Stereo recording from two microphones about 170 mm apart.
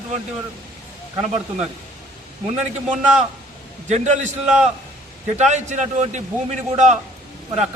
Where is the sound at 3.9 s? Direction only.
40° right (ahead or behind).